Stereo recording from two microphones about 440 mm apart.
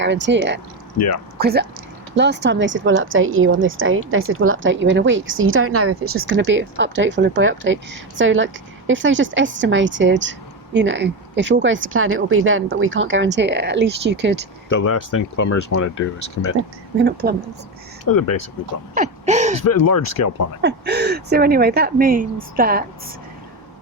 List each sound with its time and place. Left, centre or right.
0.0 s a woman's voice: right
14.8 s speech: left
16.0 s speech: left
17.0 s a woman's voice: right
18.0 s speech: left
18.9 s a sound: centre
19.5 s speech: left
20.6 s a woman's voice: right